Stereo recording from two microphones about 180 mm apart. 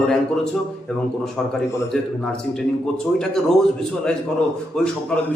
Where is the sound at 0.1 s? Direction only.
Centre (ahead or behind).